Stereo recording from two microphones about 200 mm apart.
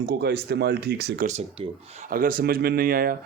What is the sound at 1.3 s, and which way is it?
Speech, 35° right (ahead or behind).